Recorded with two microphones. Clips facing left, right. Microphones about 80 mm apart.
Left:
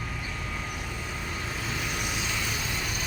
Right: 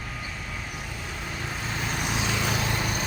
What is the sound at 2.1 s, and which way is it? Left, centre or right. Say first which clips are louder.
Vehicle: right 5 dB; right.